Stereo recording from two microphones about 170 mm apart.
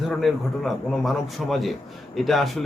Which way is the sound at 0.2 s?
Centre (ahead or behind).